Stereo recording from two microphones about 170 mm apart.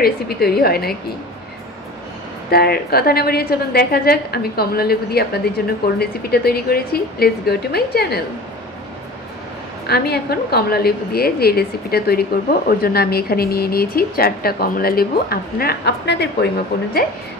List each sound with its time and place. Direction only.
0.0 s a woman's voice: 65° left (ahead or behind)
2.5 s a woman's voice: 65° left (ahead or behind)
9.8 s a woman's voice: 70° left (ahead or behind)